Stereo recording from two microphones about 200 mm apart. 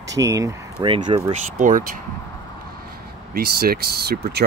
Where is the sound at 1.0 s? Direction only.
35° right (ahead or behind).